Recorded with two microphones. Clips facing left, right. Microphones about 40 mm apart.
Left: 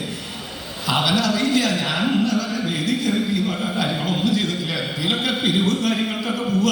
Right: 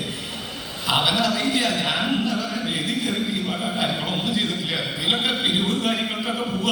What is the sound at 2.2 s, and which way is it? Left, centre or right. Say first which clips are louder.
Music: left 3 dB; right.